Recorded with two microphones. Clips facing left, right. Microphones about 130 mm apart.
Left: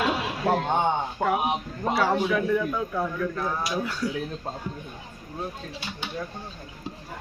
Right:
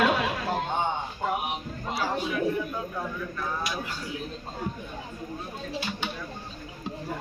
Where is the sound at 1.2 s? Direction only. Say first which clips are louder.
Left 5 dB; 75° left (ahead or behind); by 3.0 s 90° left.